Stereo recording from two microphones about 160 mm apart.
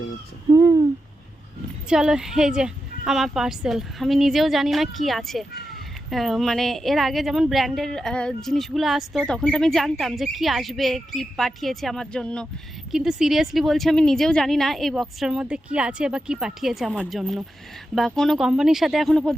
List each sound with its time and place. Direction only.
0.5 s hoot: 20° right (ahead or behind)
1.9 s speech: 5° right (ahead or behind)